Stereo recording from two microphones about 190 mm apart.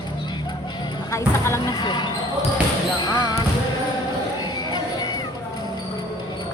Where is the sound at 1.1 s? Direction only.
15° left (ahead or behind).